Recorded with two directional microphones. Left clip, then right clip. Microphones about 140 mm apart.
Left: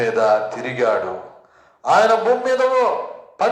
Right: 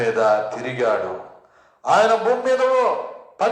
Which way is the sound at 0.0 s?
20° left (ahead or behind).